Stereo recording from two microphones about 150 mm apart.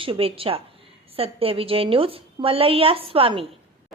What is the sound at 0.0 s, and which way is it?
A woman's voice, 40° right (ahead or behind).